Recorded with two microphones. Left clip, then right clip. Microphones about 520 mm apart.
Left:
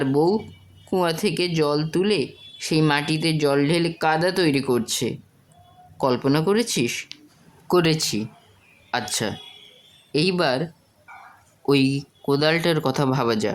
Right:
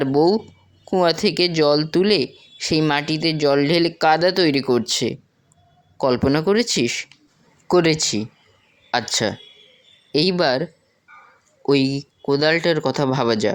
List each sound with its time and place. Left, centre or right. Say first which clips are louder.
0.0 s speech: right 3 dB; left